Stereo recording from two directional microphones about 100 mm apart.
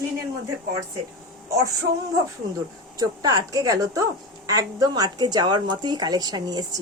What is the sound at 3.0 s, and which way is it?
A woman's voice, 40° right (ahead or behind).